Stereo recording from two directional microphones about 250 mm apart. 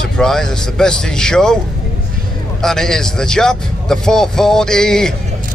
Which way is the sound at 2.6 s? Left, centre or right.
Centre.